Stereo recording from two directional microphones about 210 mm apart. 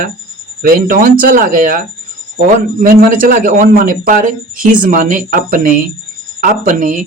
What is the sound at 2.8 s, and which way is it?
Speech, 40° right (ahead or behind).